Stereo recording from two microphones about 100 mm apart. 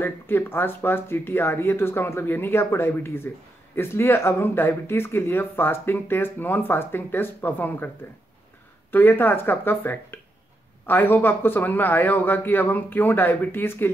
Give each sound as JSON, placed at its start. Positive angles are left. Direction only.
{"t": 0.0, "sound": "speech", "side_deg": 20}
{"t": 8.9, "sound": "speech", "side_deg": 20}